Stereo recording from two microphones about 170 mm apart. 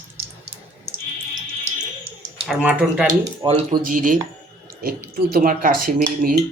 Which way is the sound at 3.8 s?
55° right (ahead or behind).